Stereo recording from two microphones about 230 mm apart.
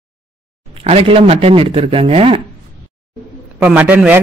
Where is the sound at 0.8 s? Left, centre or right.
Right.